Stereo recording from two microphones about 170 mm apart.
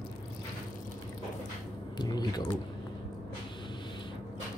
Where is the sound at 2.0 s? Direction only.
20° left (ahead or behind).